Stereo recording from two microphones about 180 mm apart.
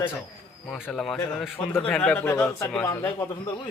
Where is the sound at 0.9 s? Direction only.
Centre (ahead or behind).